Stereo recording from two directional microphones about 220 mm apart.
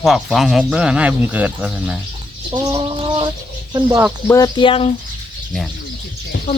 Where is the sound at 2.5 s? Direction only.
25° right (ahead or behind).